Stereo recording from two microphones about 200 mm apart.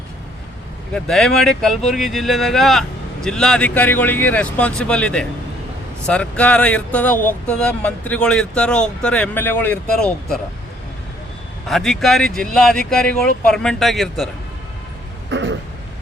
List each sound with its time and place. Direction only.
0.9 s speech: centre (ahead or behind)
11.7 s speech: centre (ahead or behind)
15.3 s throat clearing: 65° right (ahead or behind)